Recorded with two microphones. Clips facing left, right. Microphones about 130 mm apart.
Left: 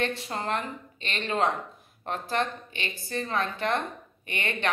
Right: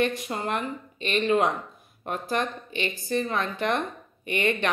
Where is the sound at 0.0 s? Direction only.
15° right (ahead or behind).